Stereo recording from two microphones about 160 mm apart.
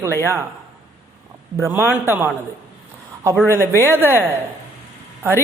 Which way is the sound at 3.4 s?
15° right (ahead or behind).